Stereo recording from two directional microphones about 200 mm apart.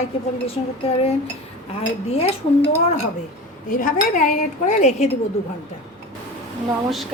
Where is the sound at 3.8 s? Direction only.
40° left (ahead or behind).